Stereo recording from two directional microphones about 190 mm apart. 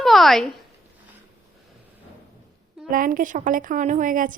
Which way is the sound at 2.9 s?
45° right (ahead or behind).